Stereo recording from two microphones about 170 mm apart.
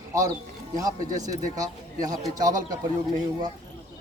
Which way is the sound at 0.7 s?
20° right (ahead or behind).